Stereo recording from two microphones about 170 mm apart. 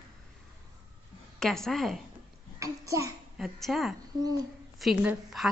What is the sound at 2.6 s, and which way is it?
Speech, 20° right (ahead or behind).